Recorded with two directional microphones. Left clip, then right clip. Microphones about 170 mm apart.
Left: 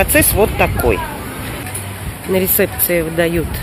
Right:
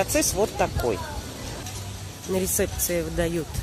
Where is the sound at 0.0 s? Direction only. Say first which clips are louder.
Left 10 dB; 5° right (ahead or behind).